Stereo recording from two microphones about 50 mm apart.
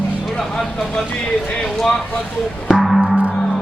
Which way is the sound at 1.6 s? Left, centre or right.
Centre.